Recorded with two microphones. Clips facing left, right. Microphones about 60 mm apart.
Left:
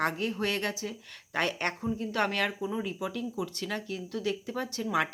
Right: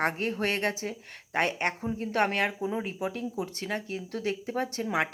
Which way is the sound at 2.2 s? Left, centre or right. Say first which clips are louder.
Right 3 dB; right.